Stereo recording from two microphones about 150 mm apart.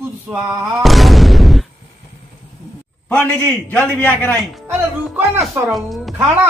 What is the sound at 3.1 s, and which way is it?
A man's voice, 10° left (ahead or behind).